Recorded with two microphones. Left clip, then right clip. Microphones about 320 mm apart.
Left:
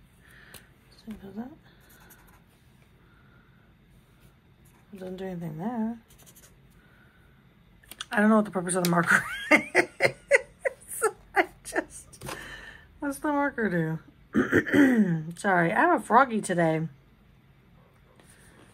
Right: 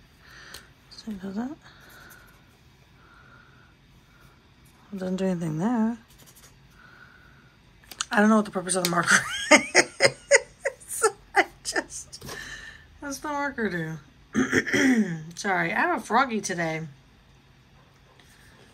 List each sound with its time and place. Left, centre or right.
0.8 s speech: centre
5.3 s speech: right
7.9 s speech: centre
8.9 s giggle: centre
12.4 s a sound: centre
15.0 s speech: centre